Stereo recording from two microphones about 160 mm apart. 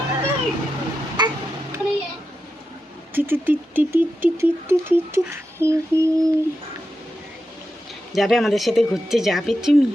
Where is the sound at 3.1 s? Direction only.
10° right (ahead or behind).